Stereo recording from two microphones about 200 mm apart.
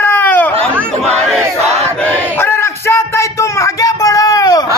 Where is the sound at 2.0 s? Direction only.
10° left (ahead or behind).